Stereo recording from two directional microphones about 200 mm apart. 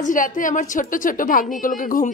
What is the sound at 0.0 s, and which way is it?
A woman's voice, 40° left (ahead or behind).